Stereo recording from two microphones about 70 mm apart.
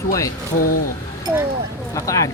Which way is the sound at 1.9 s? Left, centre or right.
Left.